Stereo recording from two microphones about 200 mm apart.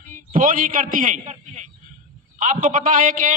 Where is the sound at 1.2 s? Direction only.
35° right (ahead or behind).